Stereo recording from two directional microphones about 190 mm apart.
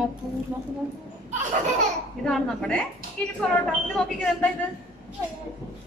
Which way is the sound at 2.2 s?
5° left (ahead or behind).